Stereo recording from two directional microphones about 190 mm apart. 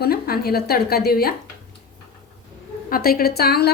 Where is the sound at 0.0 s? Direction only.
55° left (ahead or behind).